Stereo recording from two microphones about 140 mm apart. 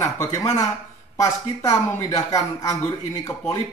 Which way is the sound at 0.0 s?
20° left (ahead or behind).